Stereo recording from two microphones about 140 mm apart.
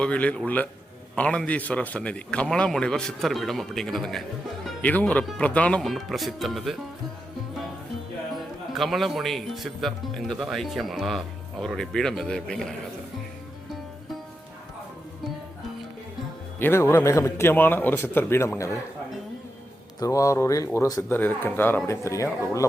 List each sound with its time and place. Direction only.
0.0 s speech: 10° left (ahead or behind)
8.7 s speech: centre (ahead or behind)
16.6 s speech: 15° left (ahead or behind)
20.0 s speech: 25° left (ahead or behind)
21.1 s speech: 15° left (ahead or behind)